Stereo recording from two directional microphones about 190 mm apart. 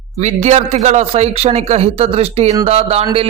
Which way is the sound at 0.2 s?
35° right (ahead or behind).